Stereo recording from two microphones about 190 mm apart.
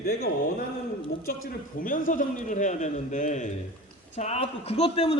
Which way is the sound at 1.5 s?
45° left (ahead or behind).